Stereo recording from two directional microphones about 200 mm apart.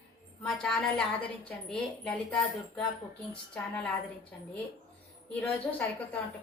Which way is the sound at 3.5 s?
5° left (ahead or behind).